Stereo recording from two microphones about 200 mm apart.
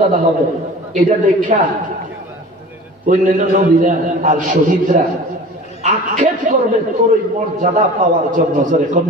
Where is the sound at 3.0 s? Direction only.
40° right (ahead or behind).